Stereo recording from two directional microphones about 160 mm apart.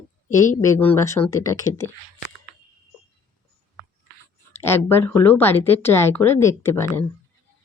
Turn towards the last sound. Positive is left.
turn(degrees=15)  # may be behind; listen again after turning